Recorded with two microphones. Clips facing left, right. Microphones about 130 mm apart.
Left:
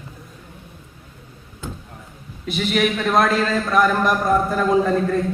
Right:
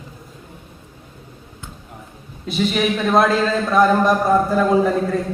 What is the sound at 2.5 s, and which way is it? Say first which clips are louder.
A man's voice: right 1 dB; 25° right (ahead or behind).